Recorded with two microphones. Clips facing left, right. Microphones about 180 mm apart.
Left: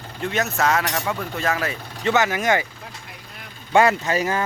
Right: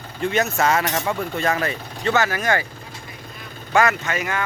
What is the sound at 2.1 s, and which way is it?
Speech, 20° left (ahead or behind).